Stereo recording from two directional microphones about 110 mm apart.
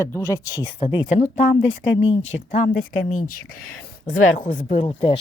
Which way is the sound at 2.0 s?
75° left (ahead or behind).